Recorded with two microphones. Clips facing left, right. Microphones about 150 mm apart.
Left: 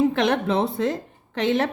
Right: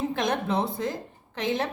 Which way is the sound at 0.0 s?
70° left (ahead or behind).